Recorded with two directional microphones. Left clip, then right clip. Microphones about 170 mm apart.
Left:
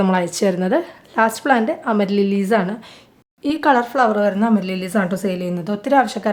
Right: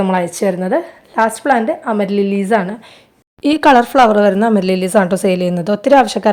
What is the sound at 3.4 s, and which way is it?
A woman's voice, 45° right (ahead or behind).